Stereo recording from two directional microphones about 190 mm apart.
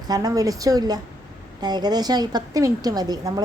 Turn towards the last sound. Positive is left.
turn(degrees=-20)  # may be behind; listen again after turning